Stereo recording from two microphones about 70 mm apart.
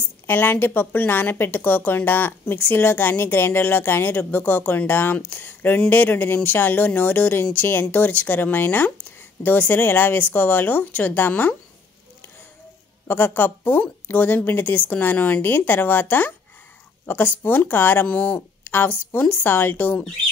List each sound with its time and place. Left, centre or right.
0.3 s speech: left
13.0 s speech: left